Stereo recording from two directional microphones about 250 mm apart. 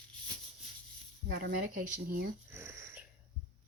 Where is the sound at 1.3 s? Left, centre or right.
Right.